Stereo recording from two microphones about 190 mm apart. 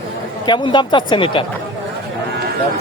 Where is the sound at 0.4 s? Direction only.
25° left (ahead or behind).